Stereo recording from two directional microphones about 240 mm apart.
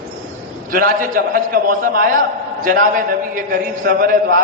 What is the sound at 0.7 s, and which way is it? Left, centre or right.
Speech, right.